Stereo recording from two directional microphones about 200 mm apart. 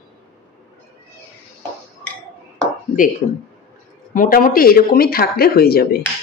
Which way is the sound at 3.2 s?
40° left (ahead or behind).